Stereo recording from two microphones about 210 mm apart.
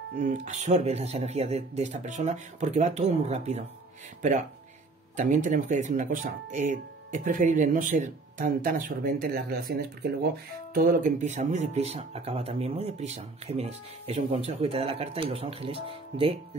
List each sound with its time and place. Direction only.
0.2 s speech: 35° right (ahead or behind)
5.1 s speech: 35° right (ahead or behind)